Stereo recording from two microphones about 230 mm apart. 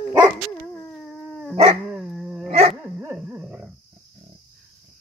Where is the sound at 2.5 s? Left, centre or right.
Right.